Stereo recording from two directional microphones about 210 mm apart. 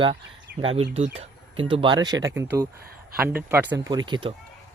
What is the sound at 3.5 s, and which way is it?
Speech, 10° right (ahead or behind).